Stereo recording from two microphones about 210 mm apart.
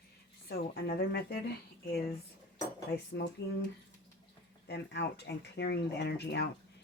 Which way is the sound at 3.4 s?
55° left (ahead or behind).